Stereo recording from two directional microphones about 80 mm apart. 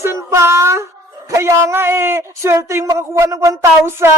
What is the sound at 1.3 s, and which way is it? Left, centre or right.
Speech, right.